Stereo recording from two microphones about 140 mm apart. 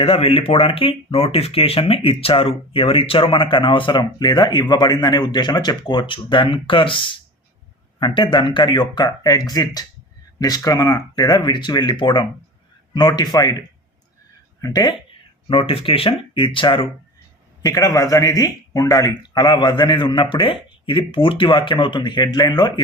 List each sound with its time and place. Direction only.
0.0 s speech: 45° left (ahead or behind)
14.6 s speech: 30° left (ahead or behind)
15.4 s speech: 40° left (ahead or behind)
17.7 s speech: 25° left (ahead or behind)